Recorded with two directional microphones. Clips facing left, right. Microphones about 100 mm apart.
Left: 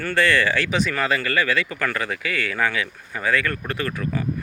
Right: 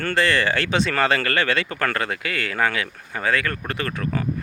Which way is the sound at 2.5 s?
40° right (ahead or behind).